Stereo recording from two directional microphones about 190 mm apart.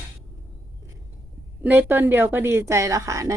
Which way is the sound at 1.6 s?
10° right (ahead or behind).